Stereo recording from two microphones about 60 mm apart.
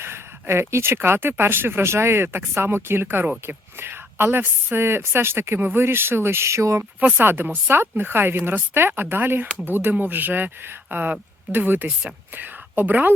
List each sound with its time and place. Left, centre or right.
0.0 s a woman's voice: right
7.2 s a woman's voice: right